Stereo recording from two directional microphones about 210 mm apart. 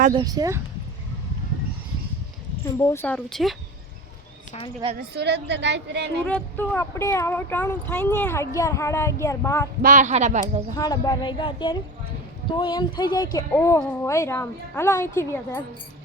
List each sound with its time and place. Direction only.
0.1 s speech: 20° right (ahead or behind)
2.7 s speech: 10° left (ahead or behind)
4.9 s a woman's voice: 50° right (ahead or behind)
6.2 s speech: 5° left (ahead or behind)
9.8 s speech: 35° right (ahead or behind)
10.8 s speech: 15° left (ahead or behind)